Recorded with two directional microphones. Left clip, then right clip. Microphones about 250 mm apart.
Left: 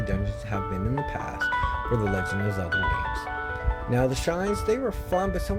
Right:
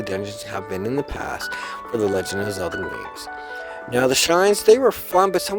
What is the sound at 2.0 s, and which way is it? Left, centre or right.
Speech, right.